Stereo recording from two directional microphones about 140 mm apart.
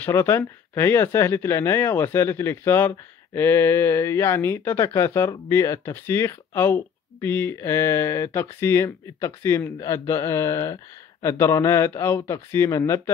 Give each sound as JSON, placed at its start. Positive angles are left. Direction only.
{"t": 0.0, "sound": "speech", "side_deg": 20}